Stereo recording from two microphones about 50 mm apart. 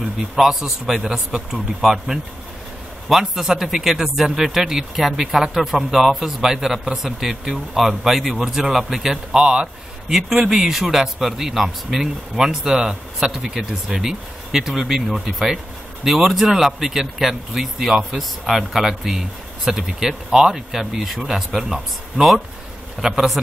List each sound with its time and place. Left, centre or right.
0.0 s a man's voice: centre
9.4 s a man's voice: centre
10.0 s a man's voice: centre
23.0 s a man's voice: centre